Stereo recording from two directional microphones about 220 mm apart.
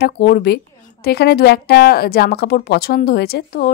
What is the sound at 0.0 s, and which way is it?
A woman's voice, 45° left (ahead or behind).